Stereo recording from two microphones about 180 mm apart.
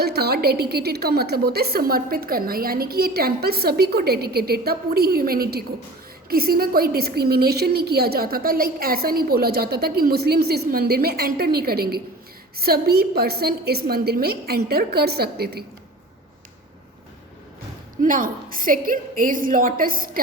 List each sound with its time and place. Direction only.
0.0 s a woman's voice: 60° right (ahead or behind)
18.0 s a woman's voice: 50° right (ahead or behind)